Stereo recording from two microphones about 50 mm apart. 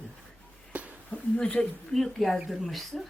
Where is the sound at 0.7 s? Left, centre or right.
Right.